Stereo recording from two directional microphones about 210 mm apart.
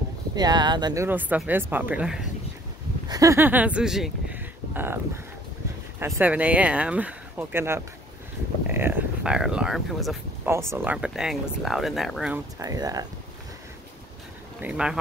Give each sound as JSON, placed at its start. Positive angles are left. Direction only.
{"t": 0.4, "sound": "speech", "side_deg": -20}
{"t": 3.1, "sound": "speech", "side_deg": -15}
{"t": 12.5, "sound": "speech", "side_deg": -15}
{"t": 14.6, "sound": "speech", "side_deg": -5}